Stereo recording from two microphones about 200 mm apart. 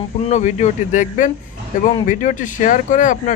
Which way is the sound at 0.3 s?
35° left (ahead or behind).